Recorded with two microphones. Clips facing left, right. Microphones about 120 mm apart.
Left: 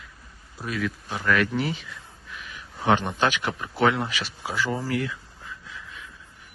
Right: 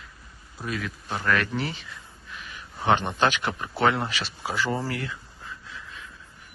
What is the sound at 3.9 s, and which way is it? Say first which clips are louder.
Speech: even; 25° right (ahead or behind).